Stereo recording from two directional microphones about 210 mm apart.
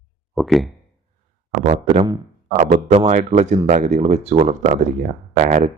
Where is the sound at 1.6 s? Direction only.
30° right (ahead or behind).